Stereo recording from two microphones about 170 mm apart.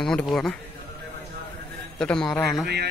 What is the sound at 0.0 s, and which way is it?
Speech, 5° left (ahead or behind).